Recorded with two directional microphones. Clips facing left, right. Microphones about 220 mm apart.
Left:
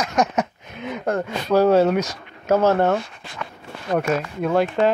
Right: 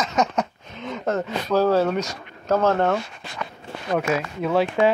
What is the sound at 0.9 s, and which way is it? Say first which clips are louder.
Speech: left 1 dB; 15° left (ahead or behind).